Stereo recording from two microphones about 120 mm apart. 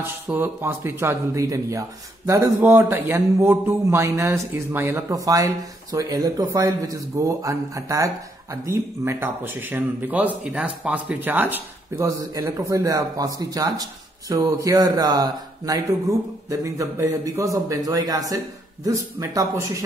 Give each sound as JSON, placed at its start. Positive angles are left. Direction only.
{"t": 0.0, "sound": "speech", "side_deg": -15}